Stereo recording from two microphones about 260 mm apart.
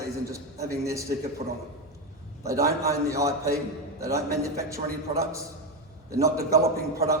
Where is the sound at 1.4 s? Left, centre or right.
Right.